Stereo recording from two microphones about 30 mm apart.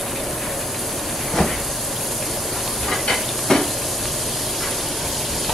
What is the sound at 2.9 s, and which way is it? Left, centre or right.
Hiss, centre.